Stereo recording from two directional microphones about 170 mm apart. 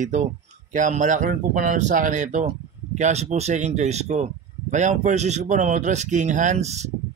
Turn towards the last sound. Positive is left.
turn(degrees=-40)  # may be behind; listen again after turning